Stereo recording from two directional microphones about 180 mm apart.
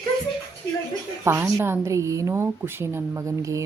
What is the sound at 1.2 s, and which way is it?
Speech, 15° right (ahead or behind).